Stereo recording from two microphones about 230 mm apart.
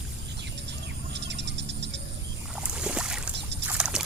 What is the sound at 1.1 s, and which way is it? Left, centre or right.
Owl, right.